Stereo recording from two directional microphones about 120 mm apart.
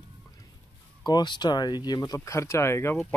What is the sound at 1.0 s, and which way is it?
Speech, 35° left (ahead or behind).